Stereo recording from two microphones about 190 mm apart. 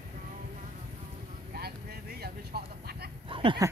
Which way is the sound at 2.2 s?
55° right (ahead or behind).